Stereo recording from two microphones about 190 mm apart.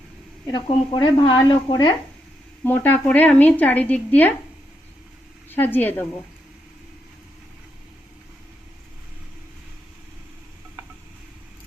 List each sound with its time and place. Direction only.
0.4 s speech: 25° left (ahead or behind)
2.6 s a woman's voice: 10° left (ahead or behind)
5.5 s a woman's voice: 10° left (ahead or behind)